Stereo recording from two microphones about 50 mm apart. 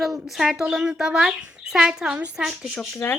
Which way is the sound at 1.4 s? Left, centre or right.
Centre.